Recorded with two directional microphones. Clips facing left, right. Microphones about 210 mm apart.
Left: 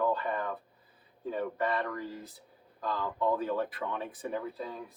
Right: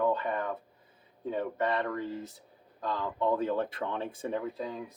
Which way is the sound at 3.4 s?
25° right (ahead or behind).